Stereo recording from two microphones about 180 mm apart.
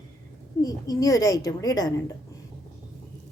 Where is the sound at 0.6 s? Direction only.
20° left (ahead or behind).